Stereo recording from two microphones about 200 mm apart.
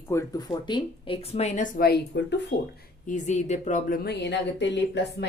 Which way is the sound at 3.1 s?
35° left (ahead or behind).